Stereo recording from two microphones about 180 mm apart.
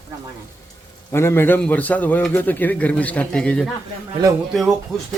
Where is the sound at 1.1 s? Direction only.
15° left (ahead or behind).